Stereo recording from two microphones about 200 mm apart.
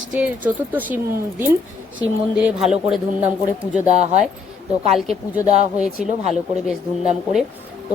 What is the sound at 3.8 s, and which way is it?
Speech, 35° right (ahead or behind).